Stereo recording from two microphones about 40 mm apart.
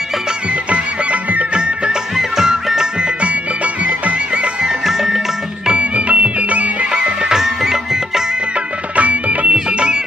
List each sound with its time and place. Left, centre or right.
0.7 s music: right
1.5 s music: right
2.1 s music: centre
3.2 s music: right
4.6 s music: centre
5.6 s music: right
6.9 s music: right
7.3 s music: centre
9.0 s music: right
9.6 s music: right